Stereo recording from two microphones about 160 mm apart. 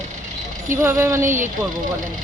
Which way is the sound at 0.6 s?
15° right (ahead or behind).